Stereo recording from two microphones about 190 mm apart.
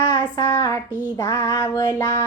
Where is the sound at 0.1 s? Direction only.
15° left (ahead or behind).